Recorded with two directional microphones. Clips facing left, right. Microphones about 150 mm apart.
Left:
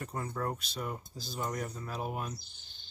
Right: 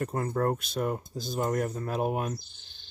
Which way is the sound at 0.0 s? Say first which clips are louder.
Right 8 dB; 50° right (ahead or behind).